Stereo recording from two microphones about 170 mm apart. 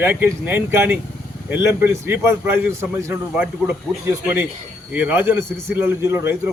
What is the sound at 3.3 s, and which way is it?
A man's voice, 5° right (ahead or behind).